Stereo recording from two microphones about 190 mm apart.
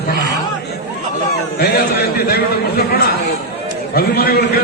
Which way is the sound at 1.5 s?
55° left (ahead or behind).